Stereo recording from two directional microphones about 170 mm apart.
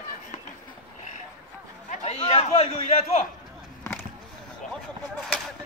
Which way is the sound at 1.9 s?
35° left (ahead or behind).